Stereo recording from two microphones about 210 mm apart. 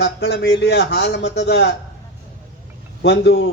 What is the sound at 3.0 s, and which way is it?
Speech, 55° left (ahead or behind).